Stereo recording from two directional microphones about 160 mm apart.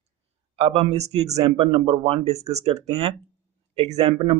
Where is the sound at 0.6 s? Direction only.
35° right (ahead or behind).